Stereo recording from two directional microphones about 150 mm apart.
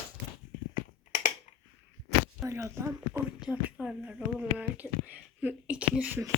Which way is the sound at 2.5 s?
20° right (ahead or behind).